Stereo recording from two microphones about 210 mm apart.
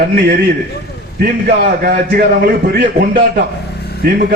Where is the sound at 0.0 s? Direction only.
45° right (ahead or behind).